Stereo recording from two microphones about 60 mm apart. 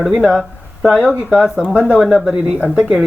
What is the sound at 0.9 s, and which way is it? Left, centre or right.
Speech, right.